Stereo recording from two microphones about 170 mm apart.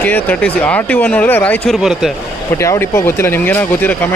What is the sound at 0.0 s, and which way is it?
Speech, 10° left (ahead or behind).